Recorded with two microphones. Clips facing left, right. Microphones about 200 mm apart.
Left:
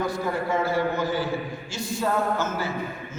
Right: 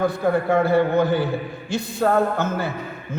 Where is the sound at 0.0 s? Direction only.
60° right (ahead or behind).